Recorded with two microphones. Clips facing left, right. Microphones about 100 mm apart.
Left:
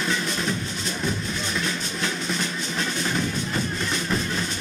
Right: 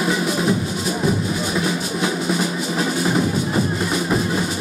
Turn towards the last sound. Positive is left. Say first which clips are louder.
# right 6 dB
turn(degrees=-15)  # may be behind; listen again after turning